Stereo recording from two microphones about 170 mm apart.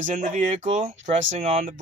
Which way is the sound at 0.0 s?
45° right (ahead or behind).